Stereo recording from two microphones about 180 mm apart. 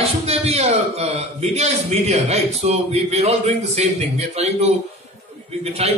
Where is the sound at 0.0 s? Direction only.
35° right (ahead or behind).